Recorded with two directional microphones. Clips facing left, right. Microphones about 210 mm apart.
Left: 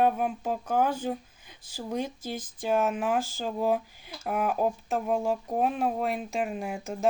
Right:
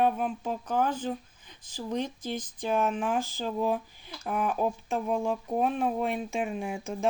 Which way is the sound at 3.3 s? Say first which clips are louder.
Even; 45° left (ahead or behind).